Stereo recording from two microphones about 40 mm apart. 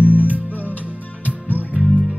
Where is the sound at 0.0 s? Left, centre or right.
Right.